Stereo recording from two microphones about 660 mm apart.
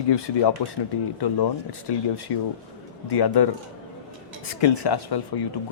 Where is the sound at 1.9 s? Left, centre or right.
Left.